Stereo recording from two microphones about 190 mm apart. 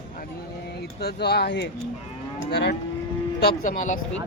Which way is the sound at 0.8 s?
55° left (ahead or behind).